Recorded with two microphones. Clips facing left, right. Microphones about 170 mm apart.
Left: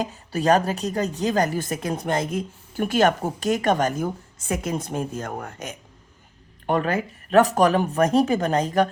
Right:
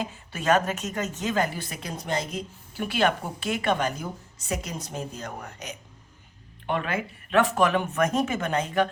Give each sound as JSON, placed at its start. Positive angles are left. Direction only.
{"t": 0.0, "sound": "a woman's voice", "side_deg": 40}